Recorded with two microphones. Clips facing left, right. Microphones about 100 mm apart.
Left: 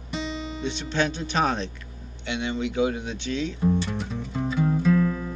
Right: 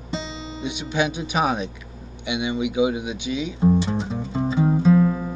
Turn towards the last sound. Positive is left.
turn(degrees=-25)  # may be behind; listen again after turning